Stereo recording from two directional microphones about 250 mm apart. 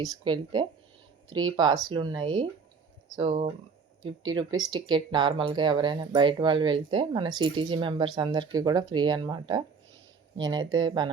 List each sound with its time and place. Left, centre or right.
0.0 s speech: centre
4.0 s speech: right
4.4 s speech: centre